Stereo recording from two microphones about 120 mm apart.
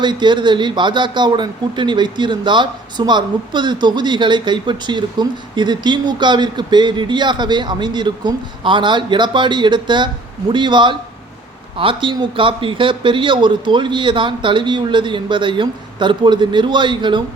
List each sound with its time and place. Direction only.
0.0 s speech: 40° right (ahead or behind)